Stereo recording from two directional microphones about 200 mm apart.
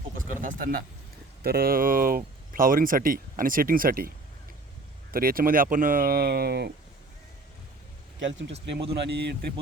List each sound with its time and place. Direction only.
0.4 s speech: 45° right (ahead or behind)
5.1 s speech: 45° right (ahead or behind)
8.2 s a man's voice: 65° right (ahead or behind)